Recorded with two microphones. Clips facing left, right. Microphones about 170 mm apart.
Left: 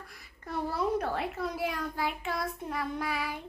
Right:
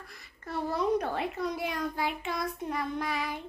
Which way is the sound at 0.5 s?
10° left (ahead or behind).